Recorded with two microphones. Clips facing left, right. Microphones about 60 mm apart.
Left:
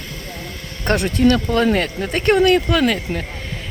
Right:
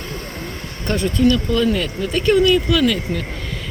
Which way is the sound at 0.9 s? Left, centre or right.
Left.